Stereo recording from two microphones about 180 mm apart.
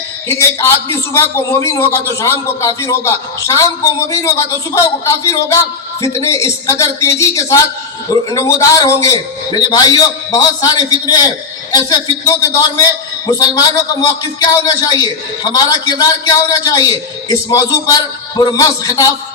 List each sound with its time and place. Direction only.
1.1 s a man's voice: 15° left (ahead or behind)